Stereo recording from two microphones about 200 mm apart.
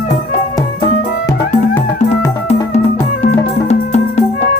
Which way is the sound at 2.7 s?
35° left (ahead or behind).